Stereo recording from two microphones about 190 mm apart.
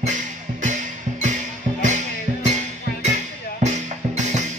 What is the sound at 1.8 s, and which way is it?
Music, 40° right (ahead or behind).